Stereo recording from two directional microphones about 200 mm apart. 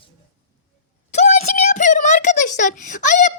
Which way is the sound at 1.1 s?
35° left (ahead or behind).